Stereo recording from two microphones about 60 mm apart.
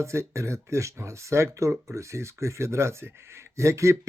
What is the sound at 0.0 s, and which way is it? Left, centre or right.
Speech, right.